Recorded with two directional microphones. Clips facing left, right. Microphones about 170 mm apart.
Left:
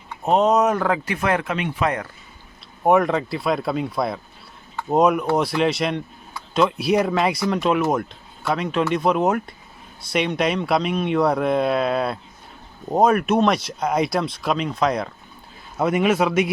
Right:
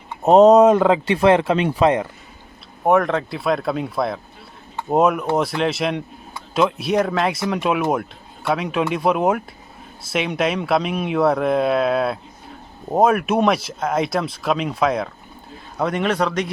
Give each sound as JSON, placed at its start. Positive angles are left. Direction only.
{"t": 0.3, "sound": "speech", "side_deg": -40}
{"t": 2.8, "sound": "speech", "side_deg": 0}